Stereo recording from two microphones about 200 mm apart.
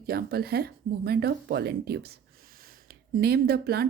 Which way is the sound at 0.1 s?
50° right (ahead or behind).